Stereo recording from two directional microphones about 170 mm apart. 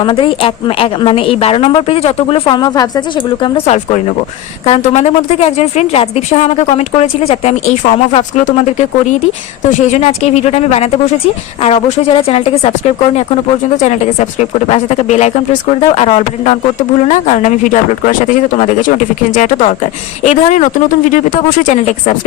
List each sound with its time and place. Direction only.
0.0 s a woman's voice: 30° left (ahead or behind)
4.8 s a woman's voice: 40° left (ahead or behind)